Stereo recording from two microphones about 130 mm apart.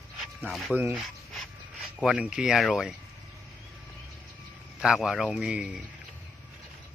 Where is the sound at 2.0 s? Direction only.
5° right (ahead or behind).